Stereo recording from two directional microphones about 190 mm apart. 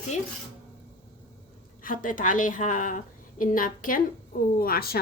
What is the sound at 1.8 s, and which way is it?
A woman's voice, 45° left (ahead or behind).